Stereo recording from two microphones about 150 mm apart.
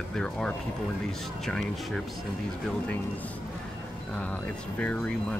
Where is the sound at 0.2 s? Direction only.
5° left (ahead or behind).